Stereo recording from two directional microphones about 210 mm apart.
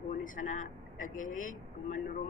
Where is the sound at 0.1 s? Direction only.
40° left (ahead or behind).